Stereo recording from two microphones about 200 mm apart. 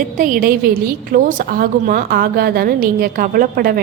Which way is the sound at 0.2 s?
45° right (ahead or behind).